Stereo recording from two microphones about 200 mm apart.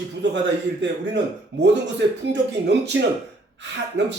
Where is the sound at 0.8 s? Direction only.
60° right (ahead or behind).